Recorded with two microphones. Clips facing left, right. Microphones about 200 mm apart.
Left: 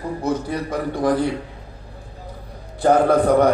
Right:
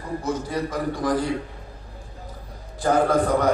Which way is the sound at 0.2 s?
60° left (ahead or behind).